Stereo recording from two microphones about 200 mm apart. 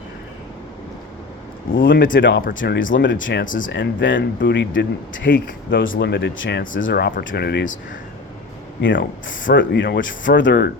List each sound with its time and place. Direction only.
1.7 s speech: 65° left (ahead or behind)
2.0 s speech: 45° left (ahead or behind)
2.6 s speech: 70° left (ahead or behind)
3.4 s speech: 40° left (ahead or behind)
3.7 s speech: 65° left (ahead or behind); by 7.8 s 50° left (ahead or behind)
8.8 s speech: 65° left (ahead or behind)